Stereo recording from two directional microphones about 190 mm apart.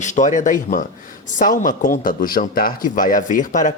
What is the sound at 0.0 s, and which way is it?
Speech, 40° left (ahead or behind).